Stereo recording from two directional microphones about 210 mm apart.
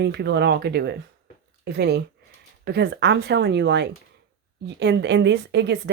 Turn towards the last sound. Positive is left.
turn(degrees=-55)  # may be behind; listen again after turning